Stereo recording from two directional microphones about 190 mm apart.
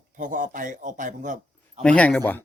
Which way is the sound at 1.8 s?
5° left (ahead or behind).